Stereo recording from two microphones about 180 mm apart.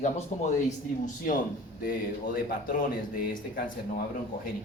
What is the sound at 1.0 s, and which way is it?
Speech, 50° left (ahead or behind).